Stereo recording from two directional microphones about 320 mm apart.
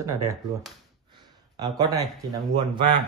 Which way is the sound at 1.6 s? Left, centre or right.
Centre.